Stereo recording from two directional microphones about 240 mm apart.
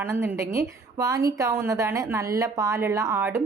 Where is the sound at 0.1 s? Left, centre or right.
Centre.